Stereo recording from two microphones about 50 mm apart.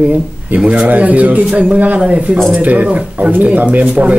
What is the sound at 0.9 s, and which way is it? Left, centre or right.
A man's voice, right.